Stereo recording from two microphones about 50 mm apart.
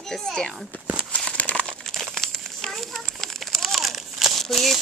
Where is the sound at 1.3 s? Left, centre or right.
Left.